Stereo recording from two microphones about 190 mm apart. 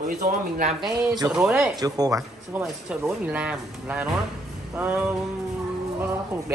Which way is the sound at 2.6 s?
5° right (ahead or behind).